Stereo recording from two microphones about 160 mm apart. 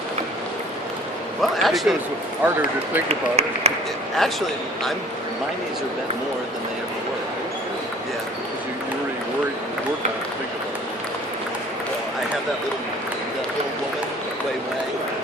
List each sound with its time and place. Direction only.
1.4 s a sound: centre (ahead or behind)
2.4 s speech: 10° right (ahead or behind)
3.1 s speech: 40° right (ahead or behind)
4.2 s a man's voice: centre (ahead or behind)